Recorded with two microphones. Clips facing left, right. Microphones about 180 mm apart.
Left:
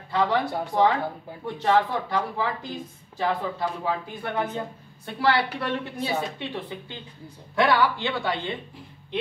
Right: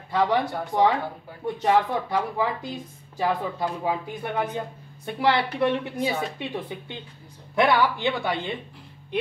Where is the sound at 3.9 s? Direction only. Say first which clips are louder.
Right 1 dB; 15° right (ahead or behind).